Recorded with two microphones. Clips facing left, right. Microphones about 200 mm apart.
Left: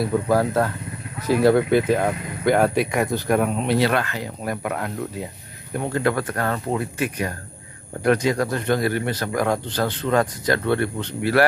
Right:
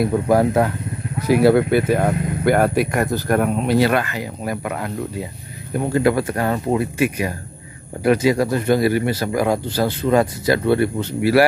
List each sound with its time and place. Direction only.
0.0 s a man's voice: 15° right (ahead or behind)